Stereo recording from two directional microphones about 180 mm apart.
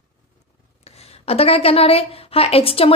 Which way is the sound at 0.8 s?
35° left (ahead or behind).